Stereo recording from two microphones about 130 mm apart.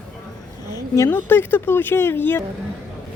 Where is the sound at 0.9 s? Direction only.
20° left (ahead or behind).